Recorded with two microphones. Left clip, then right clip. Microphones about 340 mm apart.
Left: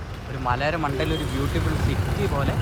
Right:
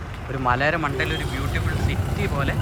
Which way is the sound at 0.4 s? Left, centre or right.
Centre.